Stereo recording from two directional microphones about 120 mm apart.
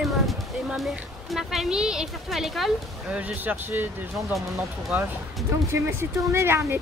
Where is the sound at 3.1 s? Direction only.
15° right (ahead or behind).